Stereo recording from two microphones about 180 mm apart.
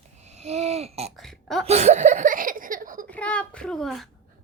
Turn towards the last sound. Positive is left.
turn(degrees=0)  # may be behind; listen again after turning